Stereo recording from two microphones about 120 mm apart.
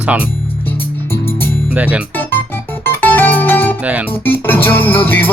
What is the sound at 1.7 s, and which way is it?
Speech, 10° right (ahead or behind).